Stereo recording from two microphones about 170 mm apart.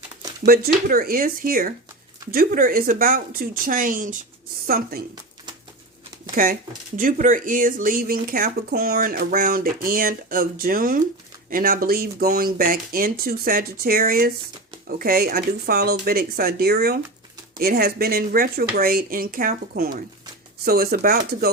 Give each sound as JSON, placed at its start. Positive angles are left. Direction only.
{"t": 0.4, "sound": "speech", "side_deg": -60}
{"t": 4.6, "sound": "speech", "side_deg": -60}
{"t": 6.3, "sound": "speech", "side_deg": -50}